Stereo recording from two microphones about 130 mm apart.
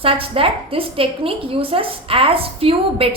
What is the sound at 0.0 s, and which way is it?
A woman's voice, 45° right (ahead or behind).